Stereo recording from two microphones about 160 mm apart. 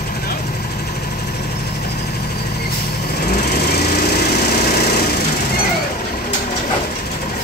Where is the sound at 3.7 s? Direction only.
80° left.